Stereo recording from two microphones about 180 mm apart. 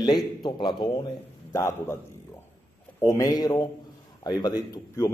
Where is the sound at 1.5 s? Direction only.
15° left (ahead or behind).